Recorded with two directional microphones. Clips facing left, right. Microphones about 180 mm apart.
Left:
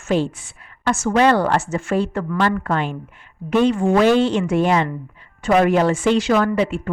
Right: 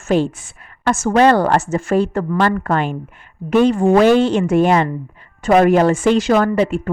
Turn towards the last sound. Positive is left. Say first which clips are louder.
# right 3 dB
turn(degrees=-45)  # may be behind; listen again after turning